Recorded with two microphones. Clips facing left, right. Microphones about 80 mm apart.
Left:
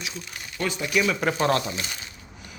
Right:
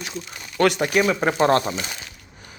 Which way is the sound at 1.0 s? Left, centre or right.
Right.